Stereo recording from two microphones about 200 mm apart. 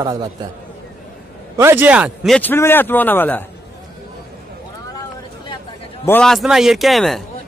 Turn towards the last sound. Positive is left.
turn(degrees=0)  # may be behind; listen again after turning